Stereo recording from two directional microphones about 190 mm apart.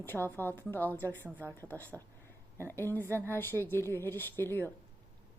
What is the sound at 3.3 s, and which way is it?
A woman's voice, 10° left (ahead or behind).